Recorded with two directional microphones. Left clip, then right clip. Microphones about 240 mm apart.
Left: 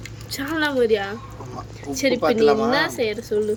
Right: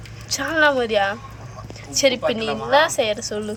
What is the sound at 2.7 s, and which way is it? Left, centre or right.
Speech, centre.